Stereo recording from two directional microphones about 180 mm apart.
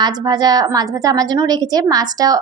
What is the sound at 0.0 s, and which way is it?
A woman's voice, 20° right (ahead or behind).